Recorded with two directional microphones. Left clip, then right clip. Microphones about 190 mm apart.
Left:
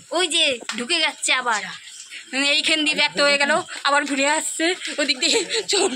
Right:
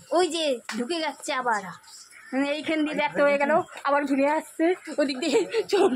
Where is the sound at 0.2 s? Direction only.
20° right (ahead or behind).